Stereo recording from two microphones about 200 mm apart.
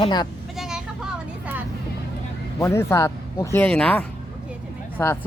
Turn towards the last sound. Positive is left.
turn(degrees=15)  # may be behind; listen again after turning